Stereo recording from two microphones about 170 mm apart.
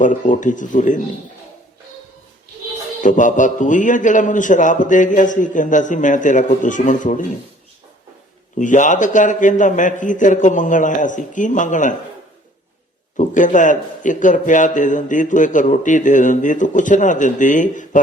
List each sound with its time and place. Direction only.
0.0 s a man's voice: 50° left (ahead or behind)
3.0 s a man's voice: 50° left (ahead or behind)
8.5 s a man's voice: 50° left (ahead or behind)
13.1 s a man's voice: 50° left (ahead or behind)